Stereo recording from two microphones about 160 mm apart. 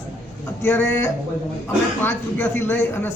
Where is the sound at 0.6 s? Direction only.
15° left (ahead or behind).